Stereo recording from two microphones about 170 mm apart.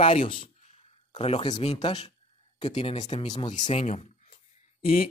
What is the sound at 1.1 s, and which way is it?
Speech, 35° left (ahead or behind).